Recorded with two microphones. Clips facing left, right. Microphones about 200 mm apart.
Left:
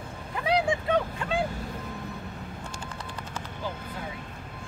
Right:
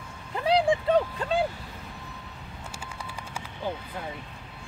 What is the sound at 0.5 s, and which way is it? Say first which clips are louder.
Vehicle: right 3 dB; 30° right (ahead or behind).